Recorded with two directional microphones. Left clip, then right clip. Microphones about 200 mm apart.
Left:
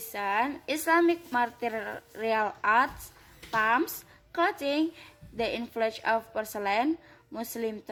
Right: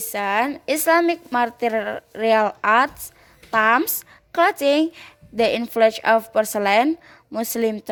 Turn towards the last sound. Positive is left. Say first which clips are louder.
# right 11 dB
turn(degrees=-45)  # may be behind; listen again after turning